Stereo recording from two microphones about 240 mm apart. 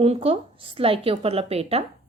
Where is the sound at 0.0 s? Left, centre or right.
Right.